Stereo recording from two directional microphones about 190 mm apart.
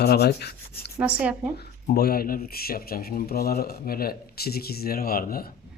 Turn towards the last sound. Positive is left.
turn(degrees=50)  # may be behind; listen again after turning